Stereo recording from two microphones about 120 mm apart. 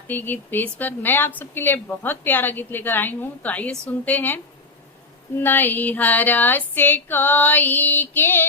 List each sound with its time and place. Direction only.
0.1 s female singing: 15° left (ahead or behind)
5.4 s female singing: 15° left (ahead or behind)